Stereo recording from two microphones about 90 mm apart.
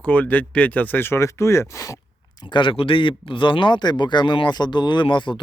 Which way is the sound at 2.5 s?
65° left (ahead or behind).